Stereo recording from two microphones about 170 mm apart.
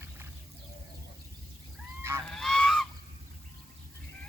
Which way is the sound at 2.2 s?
5° left (ahead or behind).